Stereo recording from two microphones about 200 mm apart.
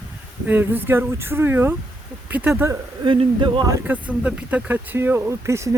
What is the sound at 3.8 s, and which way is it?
Speech, 5° right (ahead or behind).